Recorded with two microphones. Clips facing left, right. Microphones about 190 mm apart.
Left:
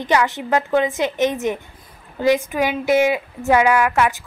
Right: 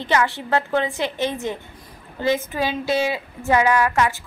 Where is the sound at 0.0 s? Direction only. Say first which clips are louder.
Left 2 dB; 15° left (ahead or behind).